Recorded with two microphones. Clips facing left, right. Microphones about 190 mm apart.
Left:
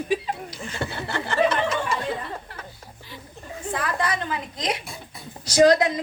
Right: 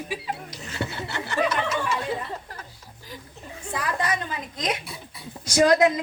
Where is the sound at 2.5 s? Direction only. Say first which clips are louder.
Even; 40° right (ahead or behind).